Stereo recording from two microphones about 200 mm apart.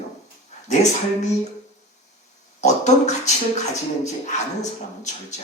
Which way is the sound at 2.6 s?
35° left (ahead or behind).